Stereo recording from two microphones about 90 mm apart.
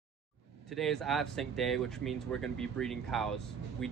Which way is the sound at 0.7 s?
5° left (ahead or behind).